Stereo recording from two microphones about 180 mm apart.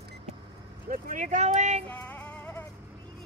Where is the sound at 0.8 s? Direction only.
50° right (ahead or behind).